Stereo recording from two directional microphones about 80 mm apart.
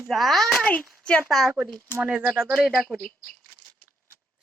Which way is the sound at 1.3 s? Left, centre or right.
Centre.